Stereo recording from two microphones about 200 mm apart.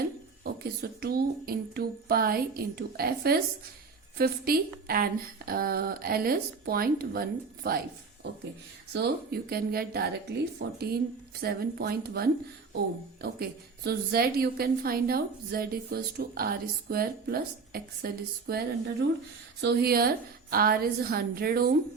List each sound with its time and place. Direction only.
0.8 s a woman's voice: 50° right (ahead or behind)
8.9 s a woman's voice: 55° right (ahead or behind)